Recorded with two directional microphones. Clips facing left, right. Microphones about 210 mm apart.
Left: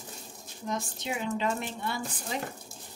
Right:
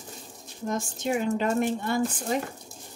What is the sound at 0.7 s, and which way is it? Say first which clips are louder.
Speech: right 6 dB; 45° right (ahead or behind).